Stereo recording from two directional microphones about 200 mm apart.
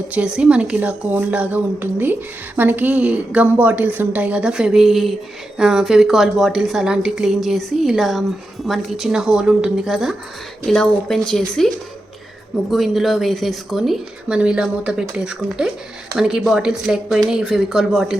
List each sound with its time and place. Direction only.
0.1 s a woman's voice: 5° right (ahead or behind)
12.7 s speech: centre (ahead or behind)